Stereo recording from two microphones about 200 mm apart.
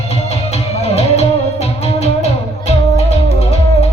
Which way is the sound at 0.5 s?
30° left (ahead or behind).